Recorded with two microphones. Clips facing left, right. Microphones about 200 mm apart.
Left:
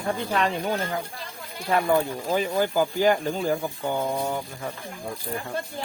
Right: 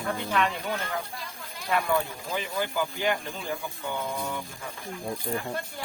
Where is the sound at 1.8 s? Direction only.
45° left (ahead or behind).